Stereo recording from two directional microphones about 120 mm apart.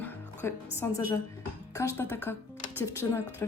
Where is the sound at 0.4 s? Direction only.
20° left (ahead or behind).